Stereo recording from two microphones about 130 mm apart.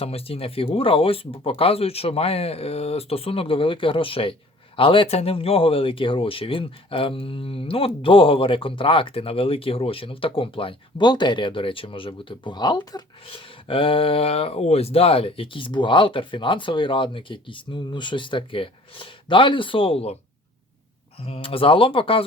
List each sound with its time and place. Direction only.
0.0 s speech: 50° left (ahead or behind)
21.2 s speech: 45° left (ahead or behind)